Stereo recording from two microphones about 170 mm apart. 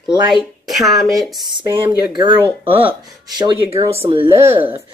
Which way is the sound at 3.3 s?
25° right (ahead or behind).